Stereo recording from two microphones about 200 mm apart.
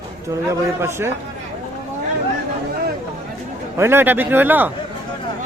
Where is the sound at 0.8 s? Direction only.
15° right (ahead or behind).